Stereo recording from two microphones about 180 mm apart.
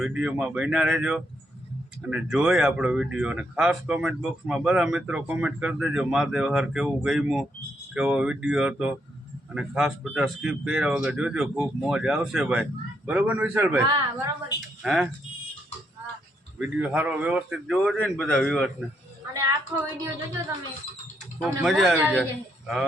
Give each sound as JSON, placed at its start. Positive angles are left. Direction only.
{"t": 0.0, "sound": "a man's voice", "side_deg": -5}
{"t": 14.8, "sound": "speech", "side_deg": 0}
{"t": 16.6, "sound": "a man's voice", "side_deg": -5}
{"t": 19.3, "sound": "a woman's voice", "side_deg": -15}
{"t": 21.4, "sound": "speech", "side_deg": 0}
{"t": 21.9, "sound": "a man's voice", "side_deg": -15}
{"t": 22.2, "sound": "speech", "side_deg": 0}